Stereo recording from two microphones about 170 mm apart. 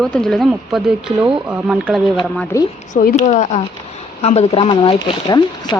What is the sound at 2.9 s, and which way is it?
Speech, 45° left (ahead or behind).